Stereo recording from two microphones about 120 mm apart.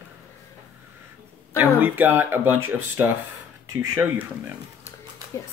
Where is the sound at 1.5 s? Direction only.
15° right (ahead or behind).